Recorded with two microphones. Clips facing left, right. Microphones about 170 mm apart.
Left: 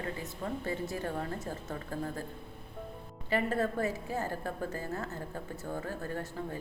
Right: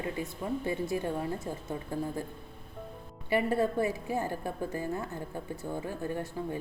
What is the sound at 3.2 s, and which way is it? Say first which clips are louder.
A woman's voice: right 3 dB; 10° right (ahead or behind).